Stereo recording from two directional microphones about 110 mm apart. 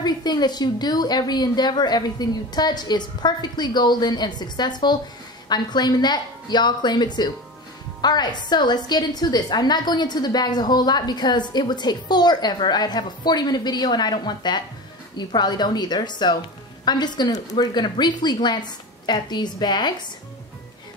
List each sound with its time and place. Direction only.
0.0 s a woman's voice: 40° left (ahead or behind)